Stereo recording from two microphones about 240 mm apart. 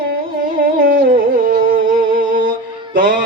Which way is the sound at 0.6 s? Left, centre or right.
Right.